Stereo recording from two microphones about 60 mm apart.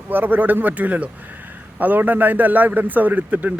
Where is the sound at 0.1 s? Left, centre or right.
Right.